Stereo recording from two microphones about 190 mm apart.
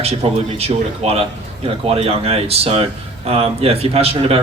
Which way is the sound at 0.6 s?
30° right (ahead or behind).